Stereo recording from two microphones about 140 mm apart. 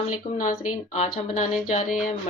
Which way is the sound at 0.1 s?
70° left (ahead or behind).